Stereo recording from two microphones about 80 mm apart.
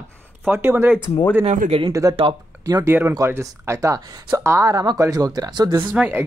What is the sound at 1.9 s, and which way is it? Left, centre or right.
Speech, right.